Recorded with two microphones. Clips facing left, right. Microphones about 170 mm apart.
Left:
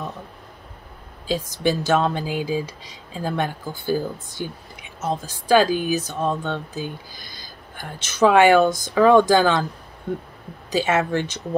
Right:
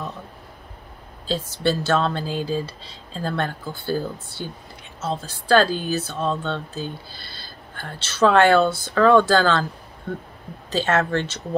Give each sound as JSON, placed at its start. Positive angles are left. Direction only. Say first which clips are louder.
{"t": 1.2, "sound": "speech", "louder": "left 1 dB", "side_deg": 15}